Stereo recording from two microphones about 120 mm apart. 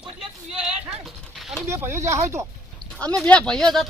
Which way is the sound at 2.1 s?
25° right (ahead or behind).